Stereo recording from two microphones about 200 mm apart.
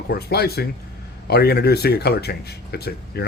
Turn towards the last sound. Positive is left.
turn(degrees=50)  # may be behind; listen again after turning